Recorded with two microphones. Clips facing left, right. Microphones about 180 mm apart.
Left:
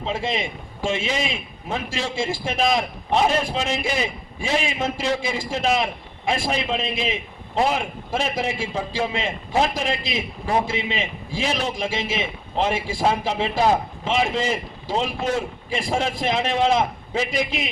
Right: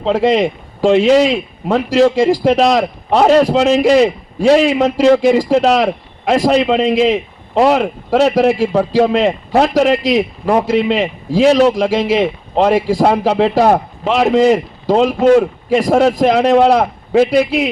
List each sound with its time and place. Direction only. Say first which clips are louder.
0.0 s a man's voice: right 13 dB; 75° right (ahead or behind)